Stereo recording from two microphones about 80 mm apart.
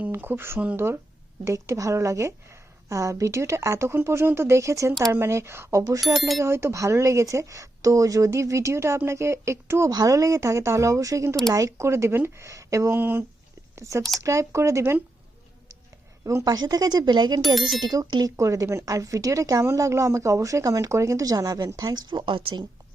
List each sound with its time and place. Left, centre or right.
0.0 s a woman's voice: right
6.1 s speech: centre
6.4 s a woman's voice: right
9.9 s a woman's voice: right
13.0 s speech: right
13.7 s a woman's voice: right
16.2 s speech: right
17.4 s speech: centre
17.8 s a woman's voice: right
18.3 s a woman's voice: right